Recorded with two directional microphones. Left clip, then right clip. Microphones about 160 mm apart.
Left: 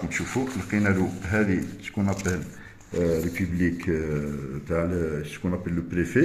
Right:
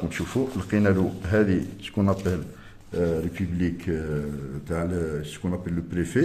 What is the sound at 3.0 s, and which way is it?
A man's voice, 20° right (ahead or behind).